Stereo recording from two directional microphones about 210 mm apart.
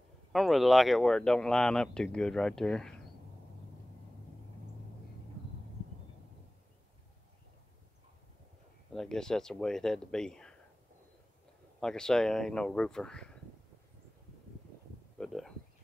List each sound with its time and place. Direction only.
0.3 s speech: centre (ahead or behind)
8.9 s speech: centre (ahead or behind)
11.8 s speech: 5° left (ahead or behind)
15.1 s a sound: centre (ahead or behind)